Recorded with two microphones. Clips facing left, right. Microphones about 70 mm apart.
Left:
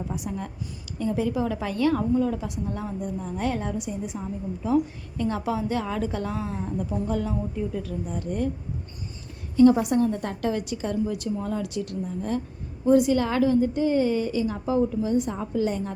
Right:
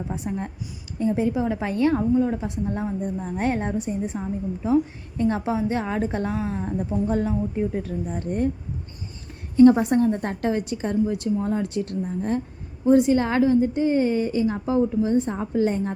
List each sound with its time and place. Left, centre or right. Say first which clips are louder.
0.1 s a woman's voice: right 3 dB; right
9.6 s a woman's voice: right 3 dB; right